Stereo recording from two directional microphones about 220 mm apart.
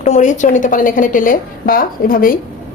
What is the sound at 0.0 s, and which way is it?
A woman's voice, 35° left (ahead or behind).